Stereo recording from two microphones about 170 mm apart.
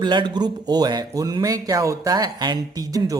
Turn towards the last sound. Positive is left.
turn(degrees=-20)  # may be behind; listen again after turning